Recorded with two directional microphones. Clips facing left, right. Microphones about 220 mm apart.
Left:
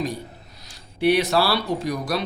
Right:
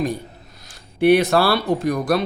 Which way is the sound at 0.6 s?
50° right (ahead or behind).